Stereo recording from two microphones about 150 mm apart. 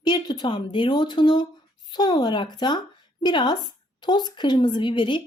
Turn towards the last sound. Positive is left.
turn(degrees=35)  # may be behind; listen again after turning